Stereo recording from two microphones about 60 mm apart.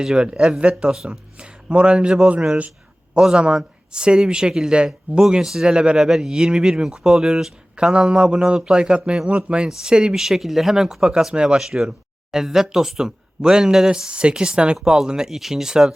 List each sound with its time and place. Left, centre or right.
0.0 s speech: centre
1.4 s speech: centre
3.2 s speech: centre